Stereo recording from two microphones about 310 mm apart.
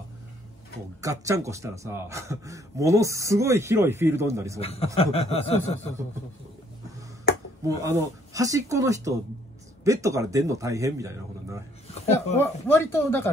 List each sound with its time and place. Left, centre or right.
1.0 s a man's voice: centre
4.6 s speech: centre
7.6 s a man's voice: centre
12.4 s speech: centre